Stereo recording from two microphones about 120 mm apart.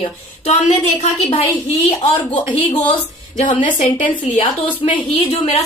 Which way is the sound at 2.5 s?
45° left (ahead or behind).